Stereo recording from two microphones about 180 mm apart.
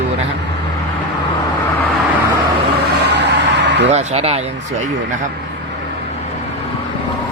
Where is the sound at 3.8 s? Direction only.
35° right (ahead or behind).